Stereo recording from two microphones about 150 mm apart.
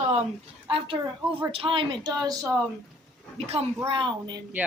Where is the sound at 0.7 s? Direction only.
35° right (ahead or behind).